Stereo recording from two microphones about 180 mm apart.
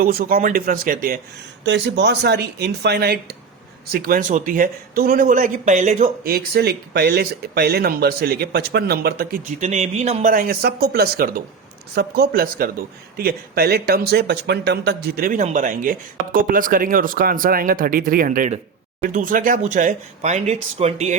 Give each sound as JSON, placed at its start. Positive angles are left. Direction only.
{"t": 0.0, "sound": "speech", "side_deg": -55}
{"t": 1.6, "sound": "speech", "side_deg": -75}
{"t": 4.0, "sound": "speech", "side_deg": -50}
{"t": 6.2, "sound": "speech", "side_deg": -60}
{"t": 9.6, "sound": "speech", "side_deg": -40}
{"t": 10.3, "sound": "speech", "side_deg": -55}